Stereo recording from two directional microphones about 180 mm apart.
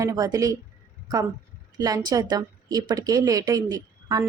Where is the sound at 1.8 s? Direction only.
20° right (ahead or behind).